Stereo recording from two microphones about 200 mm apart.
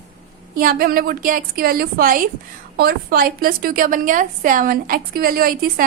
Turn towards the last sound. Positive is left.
turn(degrees=-45)  # may be behind; listen again after turning